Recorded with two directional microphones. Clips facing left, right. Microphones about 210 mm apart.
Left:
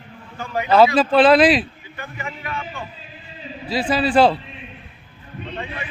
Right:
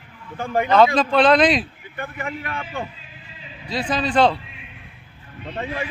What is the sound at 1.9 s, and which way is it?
Speech, 55° right (ahead or behind).